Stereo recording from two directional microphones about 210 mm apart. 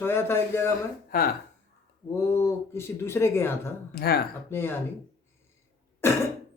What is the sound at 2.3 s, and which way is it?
A man's voice, 10° left (ahead or behind).